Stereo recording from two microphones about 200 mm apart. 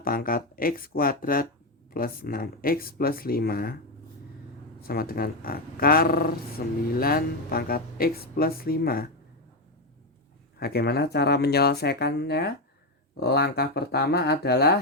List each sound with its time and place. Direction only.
0.0 s speech: 45° left (ahead or behind)
4.8 s speech: 50° left (ahead or behind)
10.6 s speech: 50° left (ahead or behind)